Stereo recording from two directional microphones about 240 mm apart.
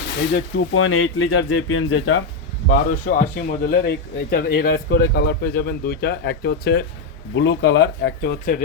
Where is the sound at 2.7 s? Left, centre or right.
Left.